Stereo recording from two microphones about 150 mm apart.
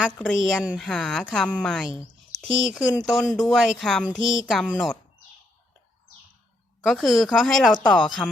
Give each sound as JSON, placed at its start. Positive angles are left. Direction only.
{"t": 0.2, "sound": "speech", "side_deg": 5}
{"t": 6.8, "sound": "speech", "side_deg": 0}